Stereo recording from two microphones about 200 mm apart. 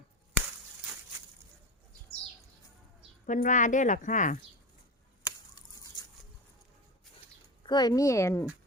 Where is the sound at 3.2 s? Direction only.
40° left (ahead or behind).